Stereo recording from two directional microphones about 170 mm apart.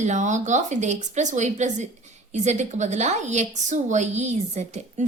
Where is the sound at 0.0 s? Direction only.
45° right (ahead or behind).